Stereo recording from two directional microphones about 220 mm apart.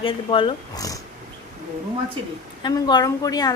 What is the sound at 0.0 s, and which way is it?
Speech, 25° left (ahead or behind).